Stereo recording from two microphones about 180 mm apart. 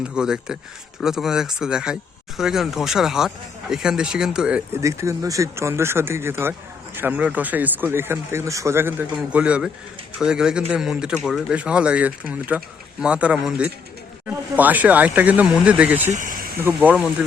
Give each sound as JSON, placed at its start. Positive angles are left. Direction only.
{"t": 0.0, "sound": "speech", "side_deg": -5}
{"t": 4.8, "sound": "speech", "side_deg": -15}
{"t": 16.1, "sound": "a sound", "side_deg": -50}
{"t": 16.6, "sound": "speech", "side_deg": -10}